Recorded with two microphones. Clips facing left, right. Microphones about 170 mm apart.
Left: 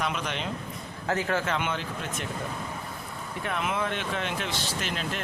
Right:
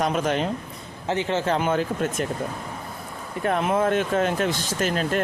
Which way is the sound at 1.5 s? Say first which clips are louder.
Right 8 dB; 40° right (ahead or behind).